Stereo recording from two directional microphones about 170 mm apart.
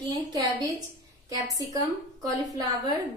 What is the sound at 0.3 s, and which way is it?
A woman's voice, 20° right (ahead or behind).